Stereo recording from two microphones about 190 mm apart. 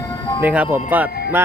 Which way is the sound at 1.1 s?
55° left (ahead or behind).